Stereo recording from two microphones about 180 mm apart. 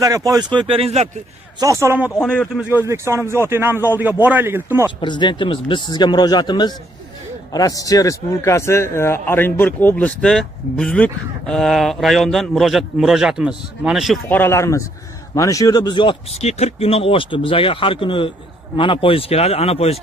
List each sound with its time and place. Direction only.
0.0 s speech: 20° right (ahead or behind); by 1.1 s 35° right (ahead or behind)
1.6 s a man's voice: 15° right (ahead or behind)
2.0 s speech: 5° left (ahead or behind)
2.7 s a man's voice: 15° right (ahead or behind)
5.0 s speech: 25° left (ahead or behind); by 14.2 s centre (ahead or behind)
14.3 s a man's voice: 15° left (ahead or behind); by 20.0 s 35° left (ahead or behind)